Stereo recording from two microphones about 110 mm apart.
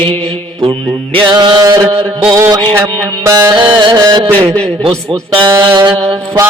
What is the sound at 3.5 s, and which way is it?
Music, 45° right (ahead or behind).